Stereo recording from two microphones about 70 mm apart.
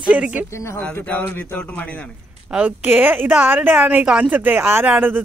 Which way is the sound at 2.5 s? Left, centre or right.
Centre.